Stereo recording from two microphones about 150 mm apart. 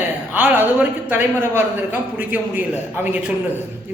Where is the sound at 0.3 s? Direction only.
10° right (ahead or behind).